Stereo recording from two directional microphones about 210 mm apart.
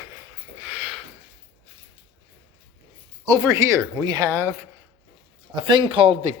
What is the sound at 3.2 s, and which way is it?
Speech, 15° right (ahead or behind).